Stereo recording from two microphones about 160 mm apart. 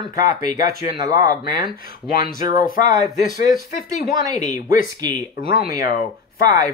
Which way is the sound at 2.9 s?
25° right (ahead or behind).